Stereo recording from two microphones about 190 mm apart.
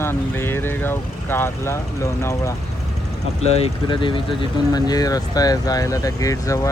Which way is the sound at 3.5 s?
30° left (ahead or behind).